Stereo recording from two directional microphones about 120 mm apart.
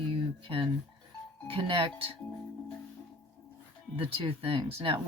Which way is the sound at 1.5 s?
50° right (ahead or behind).